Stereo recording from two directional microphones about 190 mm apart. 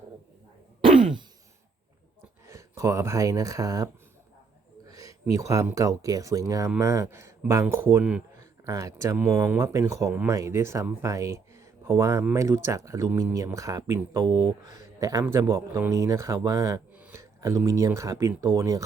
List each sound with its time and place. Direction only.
0.9 s throat clearing: 25° right (ahead or behind)
2.5 s speech: 15° right (ahead or behind)
4.9 s speech: 20° right (ahead or behind)